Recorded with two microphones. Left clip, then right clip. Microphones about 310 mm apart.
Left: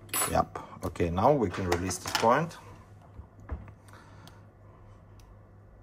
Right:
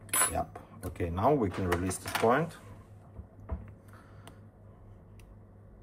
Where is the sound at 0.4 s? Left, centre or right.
Left.